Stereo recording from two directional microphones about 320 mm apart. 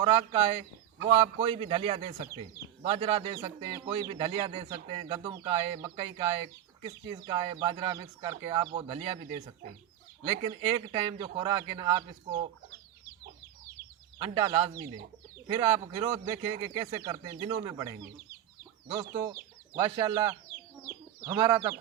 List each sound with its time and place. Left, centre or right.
0.0 s speech: centre
14.2 s speech: centre
19.1 s speech: centre